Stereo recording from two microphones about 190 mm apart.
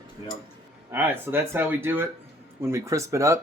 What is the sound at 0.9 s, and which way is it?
Speech, 10° right (ahead or behind).